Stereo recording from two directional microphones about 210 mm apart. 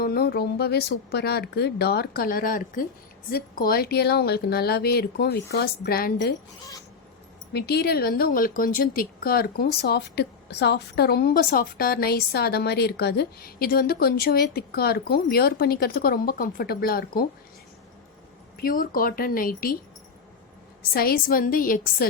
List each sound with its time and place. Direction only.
0.0 s a woman's voice: 45° left (ahead or behind)
7.5 s a woman's voice: 50° left (ahead or behind)
18.6 s a woman's voice: 40° left (ahead or behind)
20.9 s a woman's voice: 45° left (ahead or behind)